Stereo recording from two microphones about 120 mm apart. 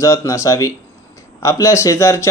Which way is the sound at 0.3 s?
25° left (ahead or behind).